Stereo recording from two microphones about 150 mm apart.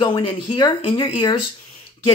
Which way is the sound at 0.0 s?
35° left (ahead or behind).